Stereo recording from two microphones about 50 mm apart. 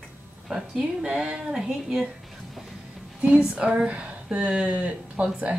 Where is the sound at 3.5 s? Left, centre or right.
Right.